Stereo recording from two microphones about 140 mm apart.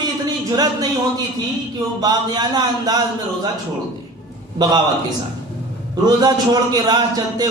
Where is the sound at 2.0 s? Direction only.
30° right (ahead or behind).